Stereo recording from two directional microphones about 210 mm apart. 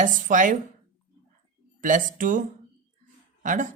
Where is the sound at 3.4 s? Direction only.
40° right (ahead or behind).